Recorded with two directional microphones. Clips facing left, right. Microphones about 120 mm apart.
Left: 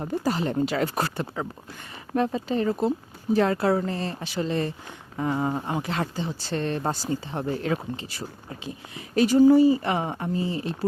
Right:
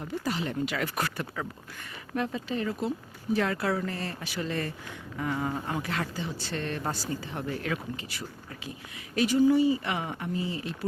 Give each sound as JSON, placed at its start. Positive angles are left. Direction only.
{"t": 0.0, "sound": "speech", "side_deg": 40}